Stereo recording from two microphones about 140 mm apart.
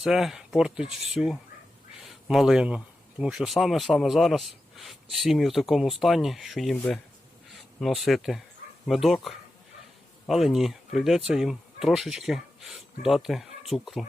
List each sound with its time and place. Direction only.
0.0 s speech: 5° right (ahead or behind)